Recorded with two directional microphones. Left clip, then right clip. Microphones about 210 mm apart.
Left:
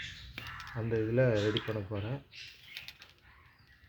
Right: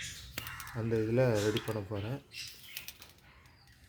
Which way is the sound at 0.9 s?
15° right (ahead or behind).